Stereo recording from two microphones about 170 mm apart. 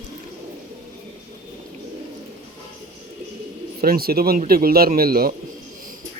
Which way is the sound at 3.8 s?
60° right (ahead or behind).